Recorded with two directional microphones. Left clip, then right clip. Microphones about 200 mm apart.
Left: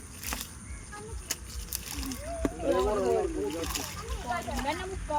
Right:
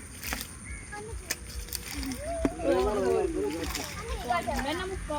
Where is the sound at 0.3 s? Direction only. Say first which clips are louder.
Right 2 dB; 10° left (ahead or behind).